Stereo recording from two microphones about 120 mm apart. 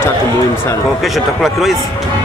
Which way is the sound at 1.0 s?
Centre (ahead or behind).